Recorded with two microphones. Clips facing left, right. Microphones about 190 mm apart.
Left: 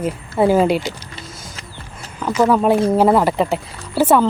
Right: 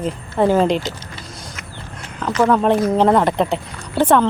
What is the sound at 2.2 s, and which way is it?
Speech, 10° left (ahead or behind).